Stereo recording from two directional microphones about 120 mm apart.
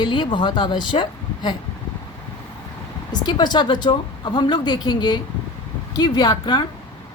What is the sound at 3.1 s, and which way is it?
A woman's voice, 40° left (ahead or behind).